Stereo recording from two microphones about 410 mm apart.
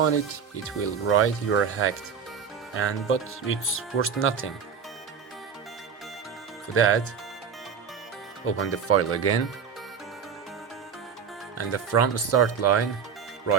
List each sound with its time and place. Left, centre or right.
0.0 s speech: left
6.7 s speech: left
8.4 s speech: left
11.5 s speech: left